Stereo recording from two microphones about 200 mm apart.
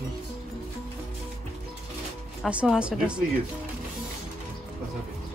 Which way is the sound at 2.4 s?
5° right (ahead or behind).